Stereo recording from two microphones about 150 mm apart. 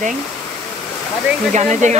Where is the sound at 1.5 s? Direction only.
50° right (ahead or behind).